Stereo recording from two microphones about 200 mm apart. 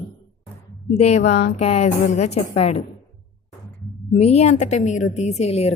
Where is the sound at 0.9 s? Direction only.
35° left (ahead or behind).